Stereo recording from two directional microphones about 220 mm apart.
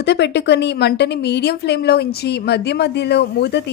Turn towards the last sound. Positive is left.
turn(degrees=50)  # may be behind; listen again after turning